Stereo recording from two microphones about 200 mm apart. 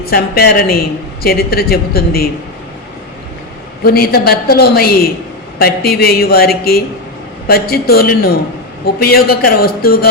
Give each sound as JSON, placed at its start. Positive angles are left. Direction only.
{"t": 0.0, "sound": "a man's voice", "side_deg": 50}
{"t": 3.8, "sound": "a man's voice", "side_deg": 50}